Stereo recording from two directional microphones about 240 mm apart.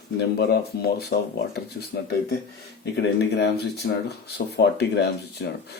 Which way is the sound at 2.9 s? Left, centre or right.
Left.